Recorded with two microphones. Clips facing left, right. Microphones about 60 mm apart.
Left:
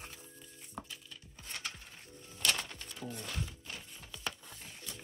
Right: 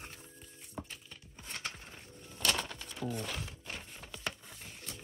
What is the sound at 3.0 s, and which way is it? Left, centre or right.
Music, right.